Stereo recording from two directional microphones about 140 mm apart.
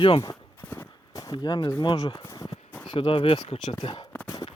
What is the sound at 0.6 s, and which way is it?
Horse, 15° left (ahead or behind).